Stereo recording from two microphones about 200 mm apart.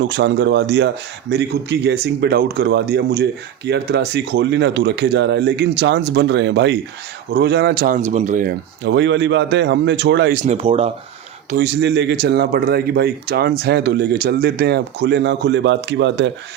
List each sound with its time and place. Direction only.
0.1 s speech: 60° right (ahead or behind)
7.9 s speech: 35° right (ahead or behind)
8.8 s speech: 65° right (ahead or behind)
10.3 s speech: 35° right (ahead or behind)
11.5 s speech: 55° right (ahead or behind)